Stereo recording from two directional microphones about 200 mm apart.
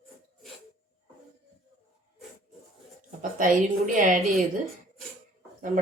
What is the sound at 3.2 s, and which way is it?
Speech, 40° right (ahead or behind).